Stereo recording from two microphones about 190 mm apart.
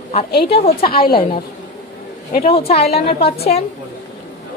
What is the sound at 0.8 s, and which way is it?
Speech, 50° left (ahead or behind).